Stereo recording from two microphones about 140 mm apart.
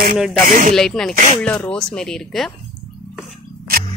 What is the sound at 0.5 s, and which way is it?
Speech, 65° right (ahead or behind).